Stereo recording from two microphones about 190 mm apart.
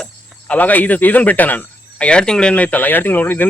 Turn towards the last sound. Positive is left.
turn(degrees=10)  # may be behind; listen again after turning